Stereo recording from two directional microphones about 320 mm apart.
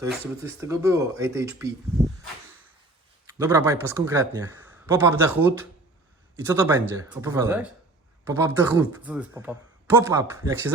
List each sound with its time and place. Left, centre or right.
0.0 s speech: centre
3.2 s speech: centre